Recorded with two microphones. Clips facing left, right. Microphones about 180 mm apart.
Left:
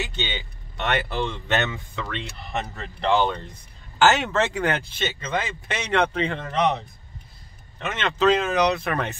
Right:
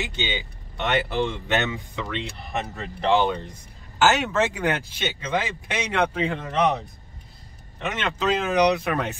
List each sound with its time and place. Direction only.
0.0 s speech: 15° right (ahead or behind)
4.0 s speech: centre (ahead or behind)
7.8 s speech: 15° right (ahead or behind)